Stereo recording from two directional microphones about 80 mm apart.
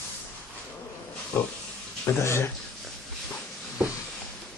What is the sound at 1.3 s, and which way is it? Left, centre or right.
Speech, centre.